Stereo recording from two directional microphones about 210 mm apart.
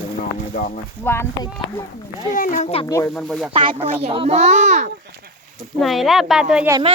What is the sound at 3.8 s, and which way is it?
A child's voice, 25° right (ahead or behind).